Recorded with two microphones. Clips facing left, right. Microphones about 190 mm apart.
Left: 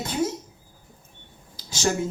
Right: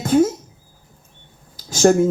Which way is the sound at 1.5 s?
50° right (ahead or behind).